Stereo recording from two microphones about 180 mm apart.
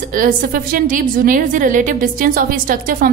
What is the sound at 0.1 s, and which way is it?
A woman's voice, 50° right (ahead or behind).